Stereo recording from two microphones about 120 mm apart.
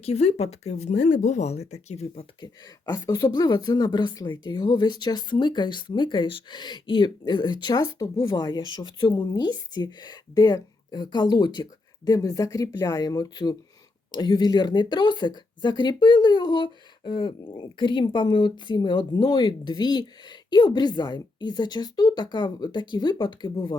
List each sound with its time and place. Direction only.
0.0 s speech: 60° left (ahead or behind)
2.8 s speech: 30° left (ahead or behind)